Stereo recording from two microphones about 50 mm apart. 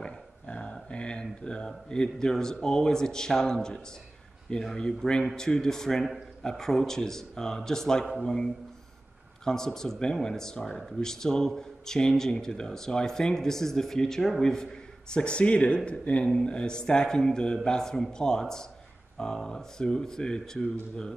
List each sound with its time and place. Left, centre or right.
0.0 s dog: centre
1.2 s speech: centre
9.4 s speech: centre